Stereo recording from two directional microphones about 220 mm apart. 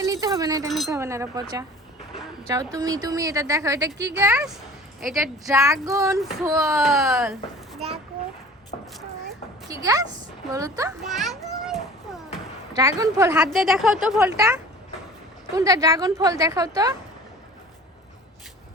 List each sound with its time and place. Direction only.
0.0 s wind chime: 15° right (ahead or behind)
0.9 s a woman's voice: 15° right (ahead or behind)
6.7 s speech: centre (ahead or behind)
9.6 s a woman's voice: 15° right (ahead or behind)
11.0 s children playing: centre (ahead or behind)
13.0 s a woman's voice: 15° right (ahead or behind)
13.4 s speech: centre (ahead or behind)
15.5 s a woman's voice: 15° right (ahead or behind)